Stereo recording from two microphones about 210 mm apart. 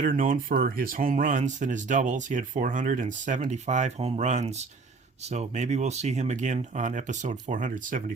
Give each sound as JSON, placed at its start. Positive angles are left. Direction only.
{"t": 0.0, "sound": "speech", "side_deg": -40}